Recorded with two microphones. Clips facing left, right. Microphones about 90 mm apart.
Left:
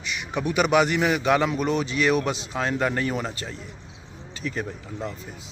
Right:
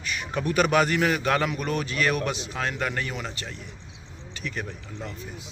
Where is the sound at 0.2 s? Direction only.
15° left (ahead or behind); by 3.7 s 30° left (ahead or behind).